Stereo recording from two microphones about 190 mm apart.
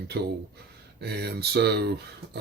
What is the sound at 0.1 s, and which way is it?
Speech, 55° right (ahead or behind).